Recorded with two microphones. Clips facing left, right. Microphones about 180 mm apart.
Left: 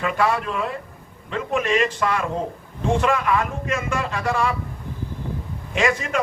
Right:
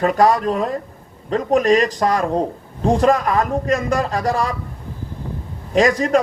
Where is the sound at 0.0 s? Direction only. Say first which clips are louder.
Right 7 dB; 40° right (ahead or behind).